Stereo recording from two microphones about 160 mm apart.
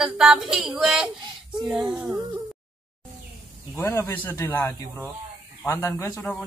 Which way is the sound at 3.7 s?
15° left (ahead or behind).